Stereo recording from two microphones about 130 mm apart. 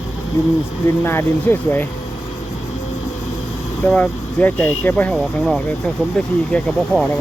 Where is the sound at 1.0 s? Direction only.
15° left (ahead or behind).